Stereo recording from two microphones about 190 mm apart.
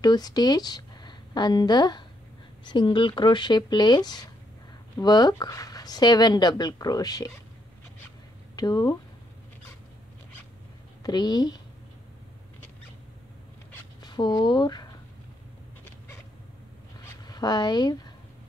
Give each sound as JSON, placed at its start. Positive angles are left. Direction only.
{"t": 0.0, "sound": "speech", "side_deg": 20}
{"t": 8.5, "sound": "speech", "side_deg": 20}
{"t": 11.0, "sound": "speech", "side_deg": 20}
{"t": 14.0, "sound": "speech", "side_deg": 20}
{"t": 17.3, "sound": "speech", "side_deg": 20}